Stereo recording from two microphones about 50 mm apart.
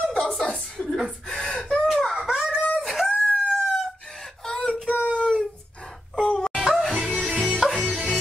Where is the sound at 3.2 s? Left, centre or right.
Centre.